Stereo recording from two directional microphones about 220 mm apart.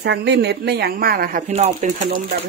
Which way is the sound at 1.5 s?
30° right (ahead or behind).